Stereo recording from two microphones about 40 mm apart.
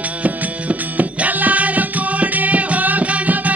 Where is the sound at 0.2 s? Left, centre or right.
Right.